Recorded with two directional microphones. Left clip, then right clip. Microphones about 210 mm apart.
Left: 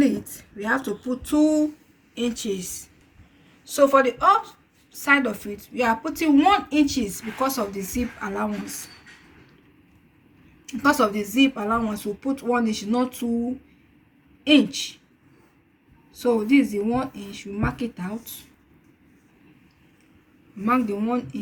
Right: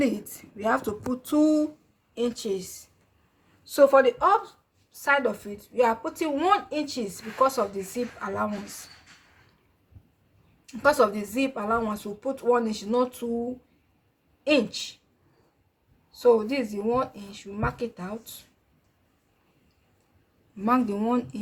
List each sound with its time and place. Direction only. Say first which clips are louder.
0.0 s speech: left 4 dB; 55° right (ahead or behind)
3.7 s a woman's voice: even; 45° right (ahead or behind)
10.7 s a woman's voice: left 1 dB; 45° right (ahead or behind)
14.4 s speech: left 4 dB; 40° right (ahead or behind)
16.1 s speech: left 1 dB; 40° right (ahead or behind)
20.7 s a woman's voice: left 1 dB; 50° right (ahead or behind)